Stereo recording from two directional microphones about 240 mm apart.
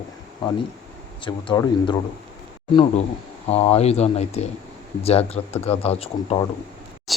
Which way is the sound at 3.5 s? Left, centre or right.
Left.